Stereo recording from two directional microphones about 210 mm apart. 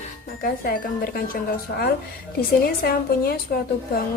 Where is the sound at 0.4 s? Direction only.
45° left (ahead or behind).